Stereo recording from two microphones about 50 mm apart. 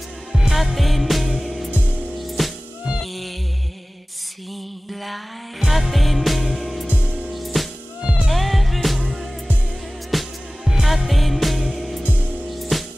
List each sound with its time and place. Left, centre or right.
0.3 s music: centre
1.7 s music: right
2.1 s music: centre
3.0 s a sound: centre
5.0 s music: centre
7.0 s music: centre
7.3 s music: centre
8.0 s music: centre
8.3 s music: centre
12.0 s music: right
12.4 s music: centre